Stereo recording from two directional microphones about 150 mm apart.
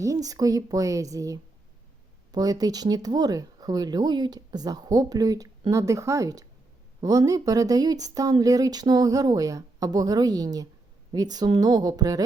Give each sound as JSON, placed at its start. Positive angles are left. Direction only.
{"t": 0.0, "sound": "speech", "side_deg": -25}